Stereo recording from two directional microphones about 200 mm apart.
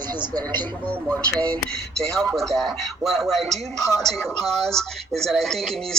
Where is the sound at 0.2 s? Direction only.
20° right (ahead or behind).